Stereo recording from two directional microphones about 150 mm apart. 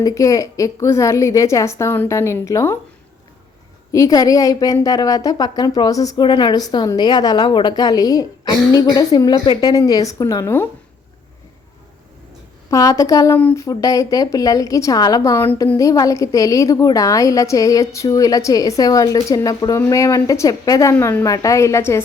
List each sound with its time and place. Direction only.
0.0 s a woman's voice: 20° left (ahead or behind)
3.9 s a woman's voice: 25° left (ahead or behind)
12.7 s a woman's voice: 20° left (ahead or behind)